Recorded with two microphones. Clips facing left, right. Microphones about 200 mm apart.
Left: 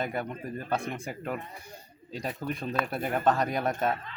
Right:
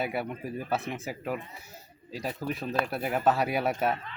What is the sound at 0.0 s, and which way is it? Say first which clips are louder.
Speech: right 1 dB; 10° right (ahead or behind).